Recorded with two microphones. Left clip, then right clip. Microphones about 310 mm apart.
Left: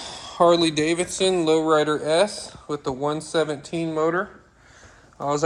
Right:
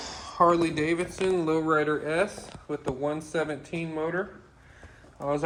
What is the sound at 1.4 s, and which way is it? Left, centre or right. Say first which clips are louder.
Speech: left 7 dB; left.